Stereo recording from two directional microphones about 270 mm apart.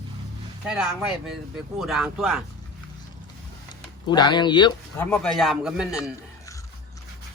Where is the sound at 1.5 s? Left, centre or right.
Centre.